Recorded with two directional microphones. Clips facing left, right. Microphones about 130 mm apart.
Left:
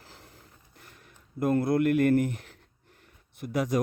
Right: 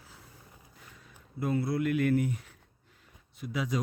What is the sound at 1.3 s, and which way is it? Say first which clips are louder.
Speech: left 6 dB; 50° left (ahead or behind).